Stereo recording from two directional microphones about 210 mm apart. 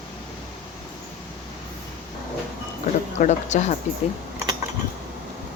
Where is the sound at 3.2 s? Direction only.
35° left (ahead or behind).